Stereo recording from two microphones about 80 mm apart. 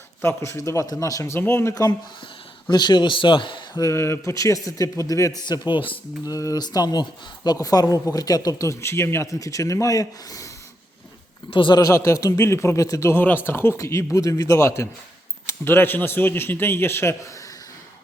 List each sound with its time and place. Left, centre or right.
0.2 s a man's voice: left
2.6 s speech: left
3.8 s a man's voice: left
5.4 s a man's voice: left
6.2 s speech: left
11.5 s speech: left
11.8 s a man's voice: left
13.1 s a man's voice: left